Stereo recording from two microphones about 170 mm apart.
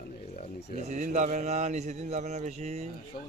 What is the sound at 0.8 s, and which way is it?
A man's voice, 45° right (ahead or behind).